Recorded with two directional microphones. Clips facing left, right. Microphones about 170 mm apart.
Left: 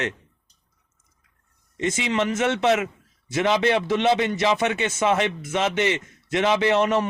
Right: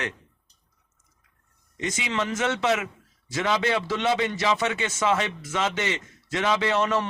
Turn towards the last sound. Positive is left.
turn(degrees=20)  # may be behind; listen again after turning